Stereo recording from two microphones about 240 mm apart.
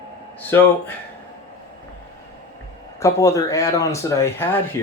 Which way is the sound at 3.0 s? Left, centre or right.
Centre.